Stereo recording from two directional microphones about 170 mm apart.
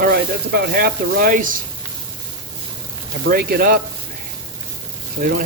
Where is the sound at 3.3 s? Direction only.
60° right (ahead or behind).